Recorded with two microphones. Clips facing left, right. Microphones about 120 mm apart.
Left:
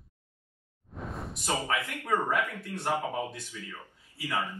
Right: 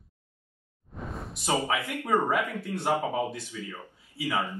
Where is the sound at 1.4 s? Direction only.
15° right (ahead or behind).